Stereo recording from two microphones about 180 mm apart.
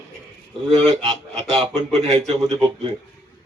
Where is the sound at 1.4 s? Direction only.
35° right (ahead or behind).